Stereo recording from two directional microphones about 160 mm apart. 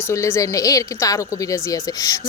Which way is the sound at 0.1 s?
20° left (ahead or behind).